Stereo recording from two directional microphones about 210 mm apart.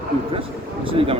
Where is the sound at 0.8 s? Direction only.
25° right (ahead or behind).